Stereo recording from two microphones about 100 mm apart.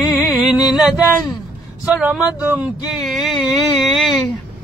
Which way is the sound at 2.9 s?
Centre (ahead or behind).